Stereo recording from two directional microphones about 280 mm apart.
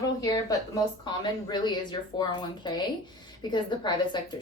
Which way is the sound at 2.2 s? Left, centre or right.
Centre.